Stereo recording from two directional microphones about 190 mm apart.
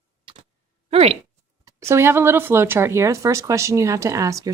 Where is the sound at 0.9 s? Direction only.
30° right (ahead or behind).